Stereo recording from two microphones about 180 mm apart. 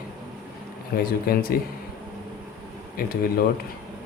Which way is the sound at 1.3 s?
55° left (ahead or behind).